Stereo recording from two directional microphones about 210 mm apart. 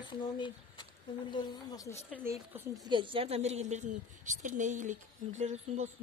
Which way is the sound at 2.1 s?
10° right (ahead or behind).